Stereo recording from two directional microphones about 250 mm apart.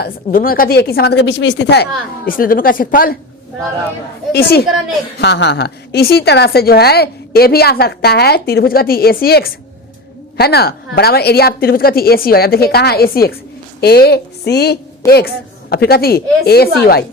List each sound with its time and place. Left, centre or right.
0.0 s a woman's voice: left
4.3 s a woman's voice: left